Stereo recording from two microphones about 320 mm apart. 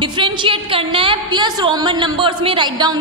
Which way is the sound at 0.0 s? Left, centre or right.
Centre.